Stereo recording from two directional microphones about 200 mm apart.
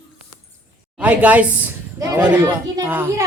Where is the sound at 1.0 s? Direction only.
5° right (ahead or behind).